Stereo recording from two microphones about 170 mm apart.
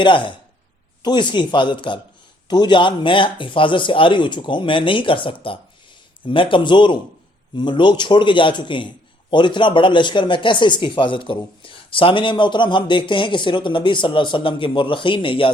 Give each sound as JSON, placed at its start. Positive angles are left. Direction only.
{"t": 0.0, "sound": "speech", "side_deg": 30}